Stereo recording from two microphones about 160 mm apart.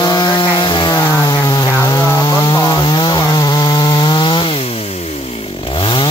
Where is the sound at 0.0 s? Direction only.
25° left (ahead or behind).